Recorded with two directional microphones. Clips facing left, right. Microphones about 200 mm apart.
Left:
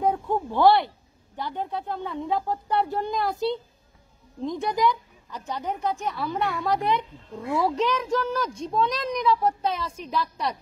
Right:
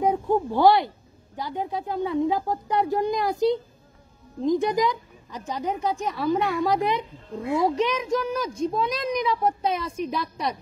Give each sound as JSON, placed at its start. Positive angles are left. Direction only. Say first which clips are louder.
{"t": 0.0, "sound": "a woman's voice", "louder": "right 3 dB", "side_deg": -15}